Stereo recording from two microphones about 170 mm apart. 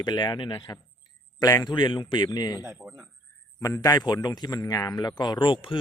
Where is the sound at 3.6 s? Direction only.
20° left (ahead or behind).